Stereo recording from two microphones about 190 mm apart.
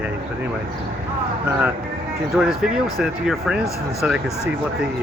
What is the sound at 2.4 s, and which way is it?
Speech, 5° right (ahead or behind).